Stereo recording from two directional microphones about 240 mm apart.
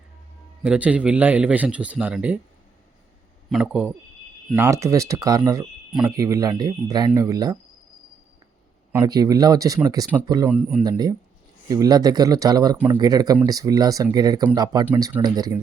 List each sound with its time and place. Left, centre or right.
0.6 s a man's voice: centre
3.5 s a man's voice: centre
8.9 s a man's voice: centre
10.8 s speech: centre